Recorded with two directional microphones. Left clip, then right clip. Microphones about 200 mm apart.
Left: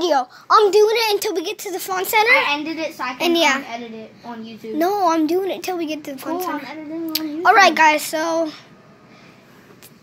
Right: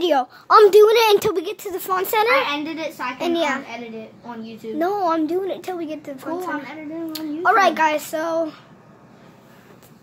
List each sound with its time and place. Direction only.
0.0 s a woman's voice: 15° right (ahead or behind)
1.4 s a woman's voice: centre (ahead or behind)
3.2 s a woman's voice: 10° left (ahead or behind)
4.7 s a woman's voice: 10° left (ahead or behind)
6.3 s speech: 20° right (ahead or behind)
7.1 s speech: 10° left (ahead or behind)